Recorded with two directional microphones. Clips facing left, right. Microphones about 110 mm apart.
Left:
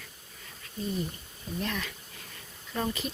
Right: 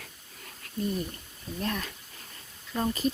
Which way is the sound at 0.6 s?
60° right (ahead or behind).